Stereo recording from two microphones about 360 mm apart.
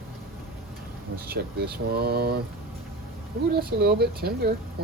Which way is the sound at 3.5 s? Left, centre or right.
Right.